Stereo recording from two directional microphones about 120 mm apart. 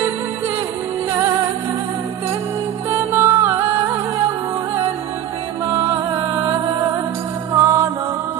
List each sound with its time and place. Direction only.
2.9 s music: 20° right (ahead or behind)
6.1 s music: 20° right (ahead or behind)
7.5 s music: 25° right (ahead or behind)